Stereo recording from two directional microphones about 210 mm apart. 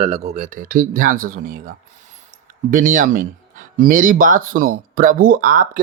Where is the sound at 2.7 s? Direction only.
40° right (ahead or behind).